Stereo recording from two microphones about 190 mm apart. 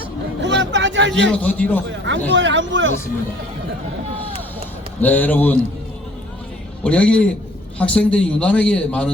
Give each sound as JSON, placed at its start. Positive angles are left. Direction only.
{"t": 0.4, "sound": "a sound", "side_deg": -70}
{"t": 1.3, "sound": "a man's voice", "side_deg": 5}
{"t": 2.3, "sound": "speech", "side_deg": -75}
{"t": 4.9, "sound": "a man's voice", "side_deg": 10}
{"t": 6.8, "sound": "a man's voice", "side_deg": 5}